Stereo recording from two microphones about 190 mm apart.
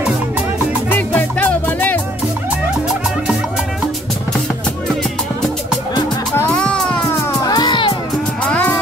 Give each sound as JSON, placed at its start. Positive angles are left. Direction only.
{"t": 0.8, "sound": "music", "side_deg": 10}
{"t": 6.3, "sound": "music", "side_deg": 10}
{"t": 7.3, "sound": "music", "side_deg": 20}
{"t": 8.5, "sound": "music", "side_deg": 10}